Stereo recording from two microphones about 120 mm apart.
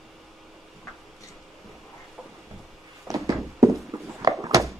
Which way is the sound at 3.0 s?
30° right (ahead or behind).